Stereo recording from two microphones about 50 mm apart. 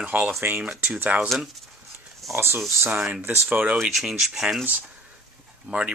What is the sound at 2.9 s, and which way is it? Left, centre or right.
Speech, right.